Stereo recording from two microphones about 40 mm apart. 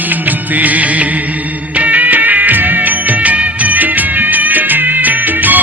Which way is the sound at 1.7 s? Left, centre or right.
Right.